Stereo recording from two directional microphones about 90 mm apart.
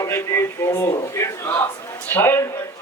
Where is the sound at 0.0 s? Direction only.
30° left (ahead or behind).